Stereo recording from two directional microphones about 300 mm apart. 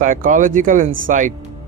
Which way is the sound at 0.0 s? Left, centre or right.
Right.